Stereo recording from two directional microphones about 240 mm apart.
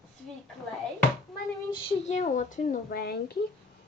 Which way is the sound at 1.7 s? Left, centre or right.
Left.